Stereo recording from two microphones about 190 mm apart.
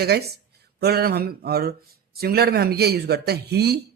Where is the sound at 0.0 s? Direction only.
55° right (ahead or behind).